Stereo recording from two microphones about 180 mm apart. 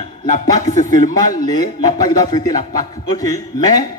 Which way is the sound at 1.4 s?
20° left (ahead or behind).